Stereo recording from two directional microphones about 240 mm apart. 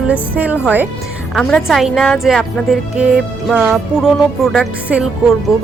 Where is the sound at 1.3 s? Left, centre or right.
Centre.